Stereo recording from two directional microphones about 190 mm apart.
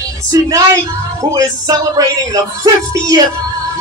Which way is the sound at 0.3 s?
20° right (ahead or behind).